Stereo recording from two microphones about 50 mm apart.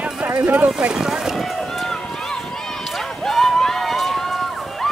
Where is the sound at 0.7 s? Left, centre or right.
Centre.